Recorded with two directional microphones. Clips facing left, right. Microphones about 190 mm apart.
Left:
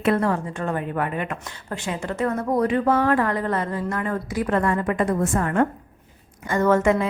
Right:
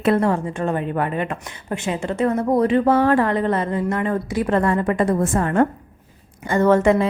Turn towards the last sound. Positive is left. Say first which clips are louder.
# right 3 dB
turn(degrees=-30)  # may be behind; listen again after turning